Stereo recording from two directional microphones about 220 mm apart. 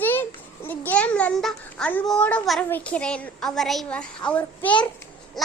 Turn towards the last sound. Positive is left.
turn(degrees=5)  # may be behind; listen again after turning